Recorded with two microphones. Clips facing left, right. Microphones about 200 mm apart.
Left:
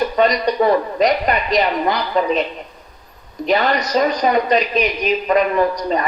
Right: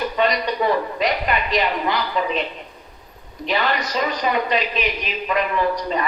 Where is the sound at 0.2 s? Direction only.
40° left (ahead or behind).